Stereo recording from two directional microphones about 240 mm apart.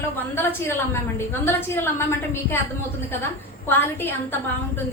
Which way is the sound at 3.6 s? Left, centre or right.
Centre.